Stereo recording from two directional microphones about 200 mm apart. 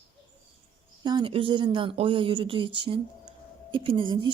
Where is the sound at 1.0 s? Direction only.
20° right (ahead or behind).